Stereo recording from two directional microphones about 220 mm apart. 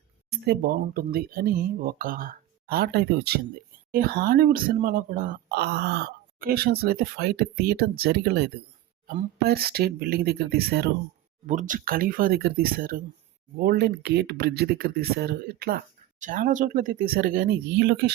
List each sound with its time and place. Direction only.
0.3 s speech: 50° right (ahead or behind)
11.4 s speech: 35° right (ahead or behind); by 18.1 s 50° right (ahead or behind)